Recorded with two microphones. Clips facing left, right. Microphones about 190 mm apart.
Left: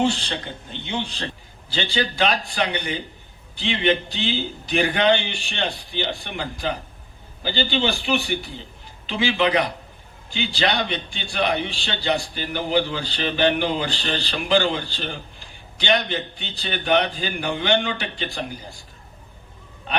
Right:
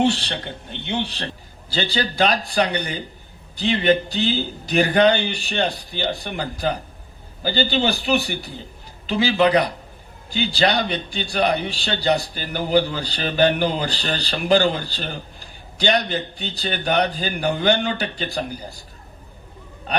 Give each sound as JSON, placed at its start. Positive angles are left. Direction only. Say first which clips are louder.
{"t": 0.0, "sound": "a man's voice", "louder": "right 2 dB", "side_deg": -65}
{"t": 1.7, "sound": "speech", "louder": "right 1 dB", "side_deg": -40}
{"t": 19.9, "sound": "speech", "louder": "right 2 dB", "side_deg": -40}